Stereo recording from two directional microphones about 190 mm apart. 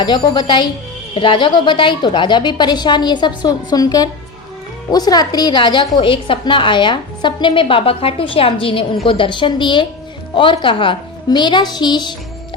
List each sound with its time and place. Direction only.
0.0 s a woman's voice: 20° left (ahead or behind)